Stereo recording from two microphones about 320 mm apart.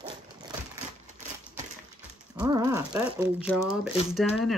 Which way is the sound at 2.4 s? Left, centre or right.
Centre.